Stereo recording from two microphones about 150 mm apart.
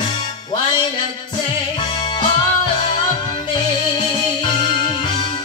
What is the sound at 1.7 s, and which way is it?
Music, 30° left (ahead or behind).